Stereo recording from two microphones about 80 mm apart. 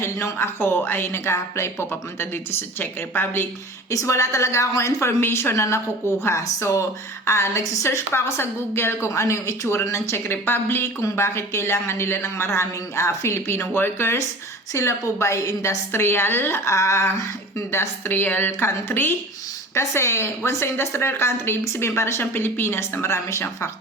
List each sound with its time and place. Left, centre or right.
0.0 s speech: left
3.9 s a woman's voice: left